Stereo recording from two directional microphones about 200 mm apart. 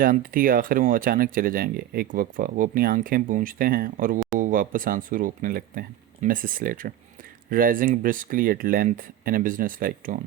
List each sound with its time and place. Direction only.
0.0 s speech: 45° right (ahead or behind)